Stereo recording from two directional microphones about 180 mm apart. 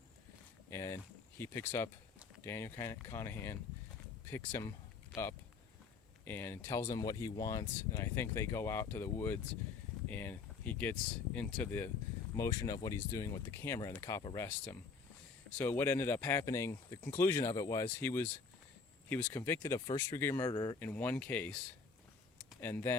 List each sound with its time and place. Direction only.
0.7 s a sound: 15° left (ahead or behind)
1.4 s speech: 15° left (ahead or behind)
6.2 s speech: 10° left (ahead or behind)
20.7 s speech: 10° left (ahead or behind)
22.6 s speech: 15° left (ahead or behind)